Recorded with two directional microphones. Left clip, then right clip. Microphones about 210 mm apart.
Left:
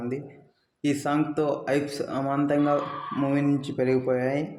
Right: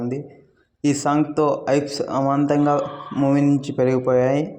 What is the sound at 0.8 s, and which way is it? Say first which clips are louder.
Speech: right 6 dB; 20° right (ahead or behind).